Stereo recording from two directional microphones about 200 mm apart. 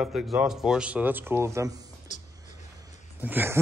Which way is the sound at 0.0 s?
Centre (ahead or behind).